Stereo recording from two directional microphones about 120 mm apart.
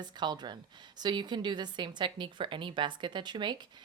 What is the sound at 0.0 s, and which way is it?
Speech, 35° right (ahead or behind).